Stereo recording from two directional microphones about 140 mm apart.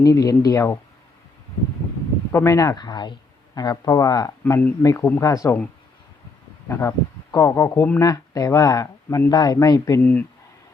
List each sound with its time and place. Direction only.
0.0 s speech: 25° left (ahead or behind)
2.3 s speech: 20° left (ahead or behind)
6.7 s speech: 20° left (ahead or behind)